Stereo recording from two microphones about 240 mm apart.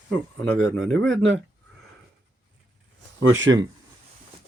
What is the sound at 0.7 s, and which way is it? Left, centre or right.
Speech, right.